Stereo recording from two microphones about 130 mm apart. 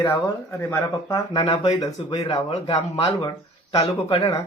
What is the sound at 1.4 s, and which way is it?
Speech, 50° left (ahead or behind).